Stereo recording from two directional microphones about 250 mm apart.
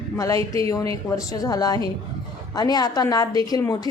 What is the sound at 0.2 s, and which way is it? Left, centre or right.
A man's voice, centre.